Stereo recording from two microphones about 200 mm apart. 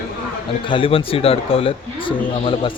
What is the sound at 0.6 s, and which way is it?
Speech, 25° left (ahead or behind).